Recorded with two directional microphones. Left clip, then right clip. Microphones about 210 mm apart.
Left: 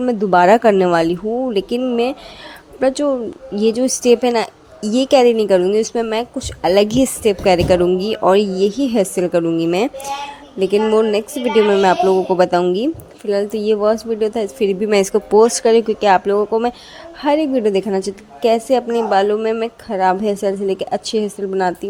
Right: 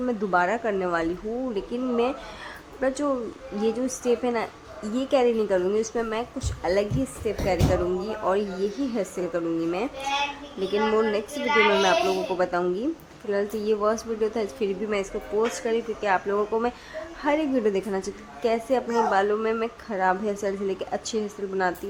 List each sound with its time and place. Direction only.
0.0 s a woman's voice: 30° left (ahead or behind)